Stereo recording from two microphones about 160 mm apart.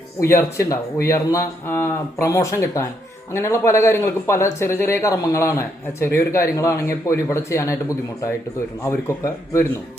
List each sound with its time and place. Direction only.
0.2 s a man's voice: 20° left (ahead or behind)